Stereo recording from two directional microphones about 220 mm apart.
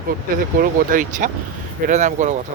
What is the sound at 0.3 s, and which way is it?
Speech, 40° right (ahead or behind).